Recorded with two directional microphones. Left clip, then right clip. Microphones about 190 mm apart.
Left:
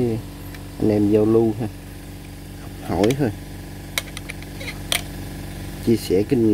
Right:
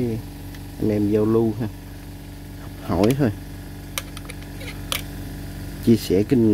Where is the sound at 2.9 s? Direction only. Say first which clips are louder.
Even; 10° right (ahead or behind).